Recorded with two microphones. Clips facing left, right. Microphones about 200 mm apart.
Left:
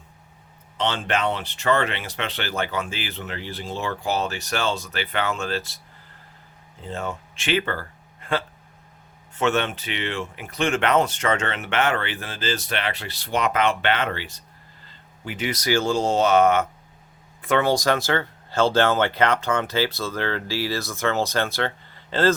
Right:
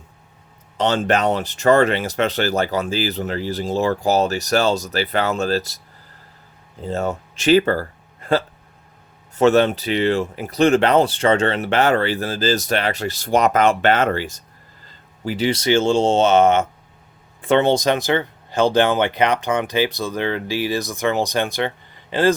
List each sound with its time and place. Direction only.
0.8 s speech: 40° right (ahead or behind)
6.8 s speech: 40° right (ahead or behind); by 22.4 s 15° right (ahead or behind)